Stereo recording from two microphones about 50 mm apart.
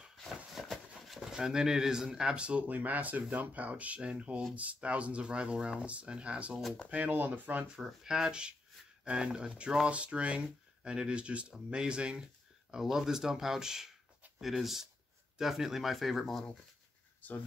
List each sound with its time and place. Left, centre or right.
0.2 s a sound: centre
2.1 s speech: centre
2.7 s speech: right
7.8 s speech: centre
12.7 s speech: centre